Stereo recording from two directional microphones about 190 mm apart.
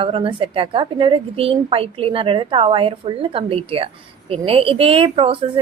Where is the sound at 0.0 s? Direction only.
30° right (ahead or behind).